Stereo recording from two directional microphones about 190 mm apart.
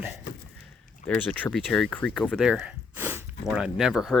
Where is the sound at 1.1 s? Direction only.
10° left (ahead or behind).